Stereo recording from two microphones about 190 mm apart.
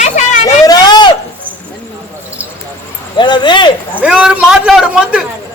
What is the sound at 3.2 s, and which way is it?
Speech, 25° left (ahead or behind).